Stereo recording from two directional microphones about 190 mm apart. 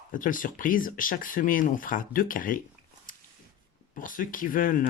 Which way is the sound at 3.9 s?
45° left (ahead or behind).